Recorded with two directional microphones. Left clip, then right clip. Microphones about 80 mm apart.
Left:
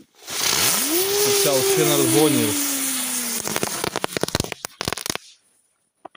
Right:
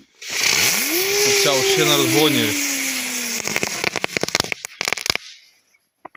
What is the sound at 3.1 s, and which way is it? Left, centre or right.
Vehicle, centre.